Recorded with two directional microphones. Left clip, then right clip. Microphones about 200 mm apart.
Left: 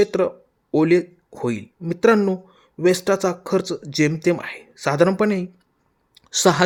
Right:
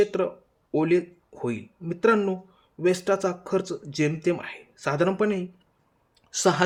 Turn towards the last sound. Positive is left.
turn(degrees=30)  # may be behind; listen again after turning